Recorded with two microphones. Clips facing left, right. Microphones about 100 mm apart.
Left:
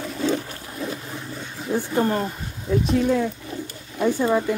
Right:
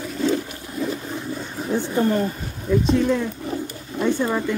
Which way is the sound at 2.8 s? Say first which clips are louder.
Left 1 dB; 5° left (ahead or behind).